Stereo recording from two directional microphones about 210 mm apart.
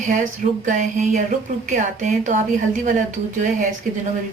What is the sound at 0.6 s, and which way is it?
Speech, 35° right (ahead or behind).